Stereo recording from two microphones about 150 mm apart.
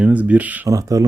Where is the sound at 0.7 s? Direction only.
25° right (ahead or behind).